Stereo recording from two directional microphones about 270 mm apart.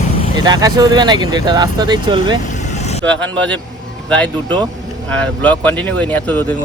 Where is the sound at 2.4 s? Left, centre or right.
Left.